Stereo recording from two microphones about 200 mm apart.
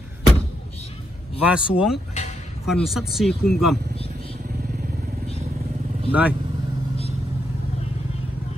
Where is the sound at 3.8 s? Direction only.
55° right (ahead or behind).